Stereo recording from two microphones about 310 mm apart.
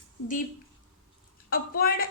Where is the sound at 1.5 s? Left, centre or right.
Left.